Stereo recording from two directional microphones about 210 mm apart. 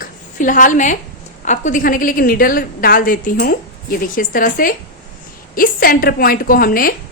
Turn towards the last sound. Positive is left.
turn(degrees=45)  # may be behind; listen again after turning